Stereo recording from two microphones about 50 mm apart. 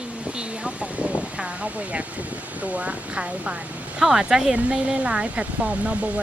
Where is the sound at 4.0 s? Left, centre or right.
Centre.